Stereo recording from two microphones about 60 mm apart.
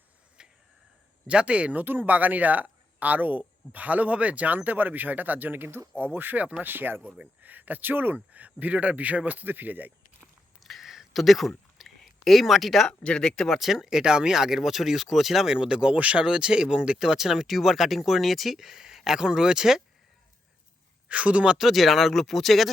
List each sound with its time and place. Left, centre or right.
0.4 s a sound: centre
1.3 s speech: centre
1.8 s speech: right
10.6 s a sound: centre
12.9 s speech: centre
13.5 s speech: centre
15.5 s speech: centre
21.1 s speech: right
21.6 s speech: centre